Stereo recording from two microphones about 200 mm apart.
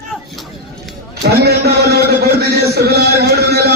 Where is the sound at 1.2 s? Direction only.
50° right (ahead or behind).